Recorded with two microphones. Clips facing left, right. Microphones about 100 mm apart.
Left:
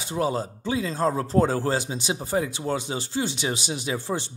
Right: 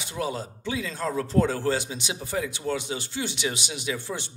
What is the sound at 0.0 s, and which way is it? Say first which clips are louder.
Speech: left 5 dB; 35° left (ahead or behind).